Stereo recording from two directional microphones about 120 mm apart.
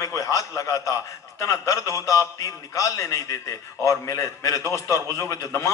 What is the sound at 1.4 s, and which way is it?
A man's voice, 25° left (ahead or behind).